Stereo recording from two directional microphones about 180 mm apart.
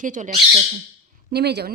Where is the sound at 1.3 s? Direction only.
65° right (ahead or behind).